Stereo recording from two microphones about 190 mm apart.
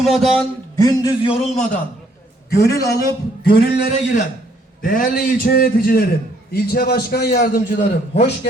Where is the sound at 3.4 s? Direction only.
55° left (ahead or behind).